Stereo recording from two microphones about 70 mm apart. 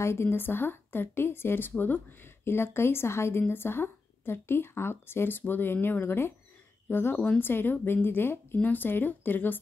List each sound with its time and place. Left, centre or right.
0.0 s speech: left
7.2 s speech: centre